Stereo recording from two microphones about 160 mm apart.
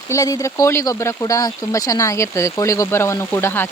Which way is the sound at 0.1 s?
20° left (ahead or behind).